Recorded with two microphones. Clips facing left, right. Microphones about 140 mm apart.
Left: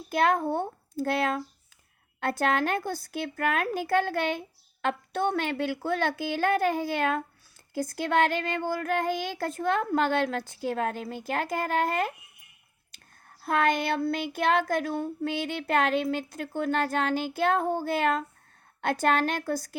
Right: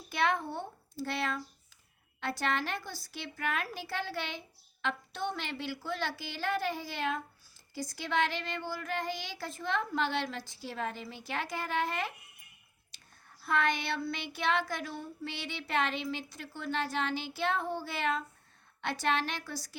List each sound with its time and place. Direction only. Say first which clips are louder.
0.1 s child singing: left 7 dB; 45° left (ahead or behind)
13.2 s child singing: left 5 dB; 50° left (ahead or behind)